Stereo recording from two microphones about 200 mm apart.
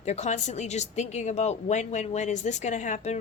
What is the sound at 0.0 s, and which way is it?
A woman's voice, 35° left (ahead or behind).